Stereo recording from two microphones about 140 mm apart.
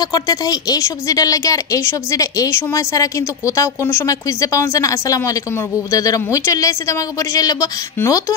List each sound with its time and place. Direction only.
0.0 s speech: 25° left (ahead or behind)